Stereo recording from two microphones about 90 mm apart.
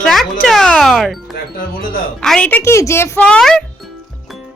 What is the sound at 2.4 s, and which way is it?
Speech, 15° left (ahead or behind).